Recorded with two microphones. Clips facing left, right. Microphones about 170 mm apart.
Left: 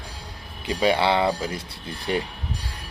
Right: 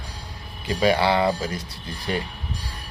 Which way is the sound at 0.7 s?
20° left (ahead or behind).